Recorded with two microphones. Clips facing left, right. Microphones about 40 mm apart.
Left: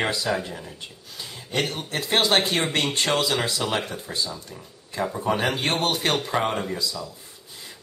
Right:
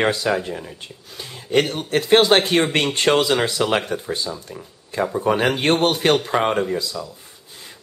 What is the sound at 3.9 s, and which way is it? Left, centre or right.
Speech, right.